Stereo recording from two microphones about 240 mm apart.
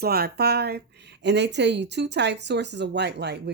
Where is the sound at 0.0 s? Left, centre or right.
Right.